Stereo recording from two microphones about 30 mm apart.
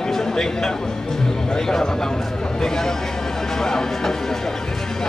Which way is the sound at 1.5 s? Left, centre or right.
Centre.